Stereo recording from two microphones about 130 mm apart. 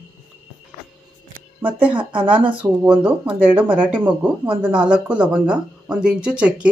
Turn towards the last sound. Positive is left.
turn(degrees=-10)  # may be behind; listen again after turning